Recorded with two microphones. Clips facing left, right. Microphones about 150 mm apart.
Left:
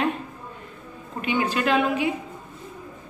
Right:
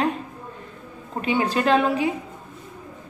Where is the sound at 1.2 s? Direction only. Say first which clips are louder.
Right 2 dB; 35° right (ahead or behind).